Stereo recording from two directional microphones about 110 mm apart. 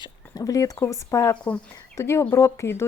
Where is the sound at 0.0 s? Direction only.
35° left (ahead or behind).